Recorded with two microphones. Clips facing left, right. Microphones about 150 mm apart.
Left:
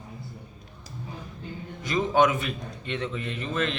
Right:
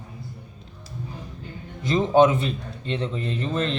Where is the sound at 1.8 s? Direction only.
30° right (ahead or behind).